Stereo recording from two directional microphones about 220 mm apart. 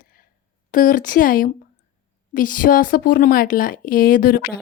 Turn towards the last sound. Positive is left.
turn(degrees=40)  # may be behind; listen again after turning